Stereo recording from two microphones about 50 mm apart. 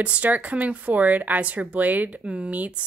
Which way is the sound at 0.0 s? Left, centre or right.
Right.